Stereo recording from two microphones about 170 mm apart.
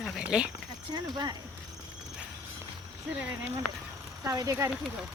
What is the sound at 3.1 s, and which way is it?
Speech, 10° right (ahead or behind).